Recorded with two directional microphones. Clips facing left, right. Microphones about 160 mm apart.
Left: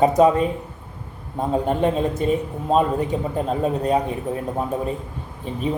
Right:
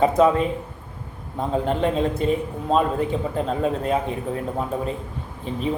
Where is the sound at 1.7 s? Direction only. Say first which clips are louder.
Left 2 dB; 15° left (ahead or behind).